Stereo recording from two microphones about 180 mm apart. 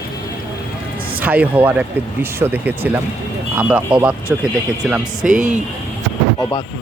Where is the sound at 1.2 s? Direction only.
10° right (ahead or behind).